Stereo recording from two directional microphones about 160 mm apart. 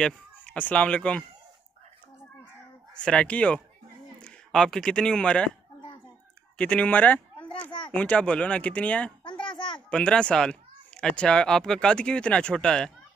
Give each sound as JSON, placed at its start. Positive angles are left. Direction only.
{"t": 0.0, "sound": "speech", "side_deg": 5}
{"t": 2.9, "sound": "speech", "side_deg": 5}
{"t": 6.6, "sound": "speech", "side_deg": 5}
{"t": 9.2, "sound": "a sound", "side_deg": 30}
{"t": 9.8, "sound": "speech", "side_deg": 5}